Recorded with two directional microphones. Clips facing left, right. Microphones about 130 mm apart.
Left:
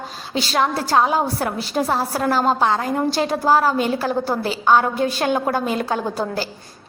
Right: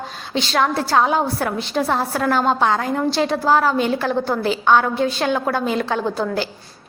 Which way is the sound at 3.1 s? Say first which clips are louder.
Right 1 dB; 40° left (ahead or behind).